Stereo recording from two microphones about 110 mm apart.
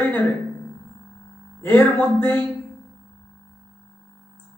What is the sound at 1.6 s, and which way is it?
Speech, 20° left (ahead or behind).